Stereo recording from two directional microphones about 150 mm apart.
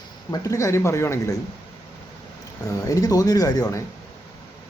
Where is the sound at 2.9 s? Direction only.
25° left (ahead or behind).